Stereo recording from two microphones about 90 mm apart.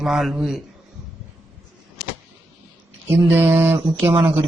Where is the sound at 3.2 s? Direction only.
25° right (ahead or behind).